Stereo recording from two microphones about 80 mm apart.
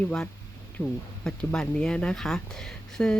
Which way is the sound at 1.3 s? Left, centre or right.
Centre.